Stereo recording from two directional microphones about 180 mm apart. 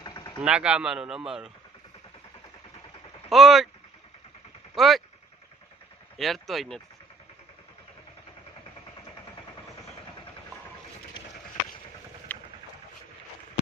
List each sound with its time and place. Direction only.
0.0 s vehicle: 20° left (ahead or behind)
0.4 s speech: 5° right (ahead or behind)
3.2 s speech: centre (ahead or behind)
4.7 s speech: centre (ahead or behind)
6.1 s speech: centre (ahead or behind)
12.3 s a sound: 10° left (ahead or behind)